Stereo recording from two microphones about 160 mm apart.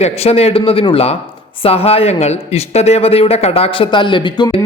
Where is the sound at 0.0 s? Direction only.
40° left (ahead or behind).